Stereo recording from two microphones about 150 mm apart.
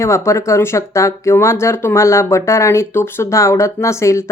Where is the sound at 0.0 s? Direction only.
20° left (ahead or behind).